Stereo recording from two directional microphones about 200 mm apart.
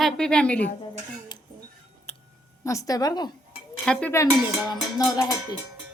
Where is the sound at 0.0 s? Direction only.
5° left (ahead or behind).